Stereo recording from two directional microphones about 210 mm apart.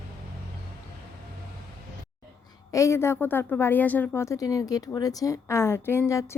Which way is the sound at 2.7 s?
15° left (ahead or behind).